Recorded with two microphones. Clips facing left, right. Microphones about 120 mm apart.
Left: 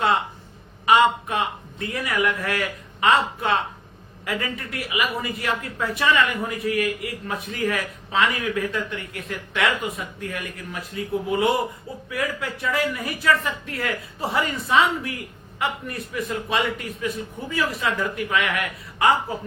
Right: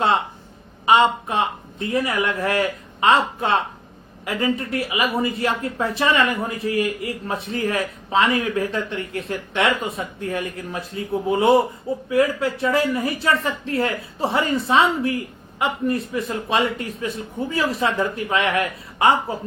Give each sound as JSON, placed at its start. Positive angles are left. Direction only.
{"t": 0.9, "sound": "speech", "side_deg": -25}